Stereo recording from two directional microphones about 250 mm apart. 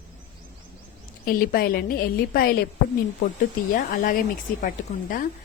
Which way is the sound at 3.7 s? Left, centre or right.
Left.